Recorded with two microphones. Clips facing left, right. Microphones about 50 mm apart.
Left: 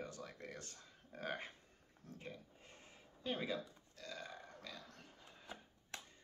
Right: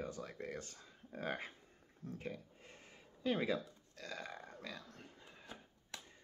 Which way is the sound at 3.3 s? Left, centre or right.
Right.